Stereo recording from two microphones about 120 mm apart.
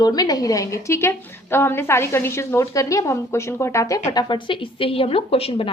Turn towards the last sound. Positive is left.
turn(degrees=55)  # may be behind; listen again after turning